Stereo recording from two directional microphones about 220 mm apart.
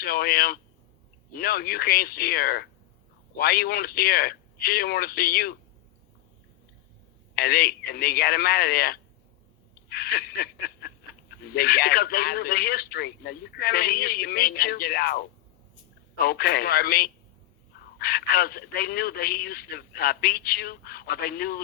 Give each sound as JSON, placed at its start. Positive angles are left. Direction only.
{"t": 0.0, "sound": "speech", "side_deg": 45}
{"t": 7.3, "sound": "speech", "side_deg": 45}
{"t": 9.9, "sound": "a sound", "side_deg": 45}
{"t": 11.4, "sound": "speech", "side_deg": 45}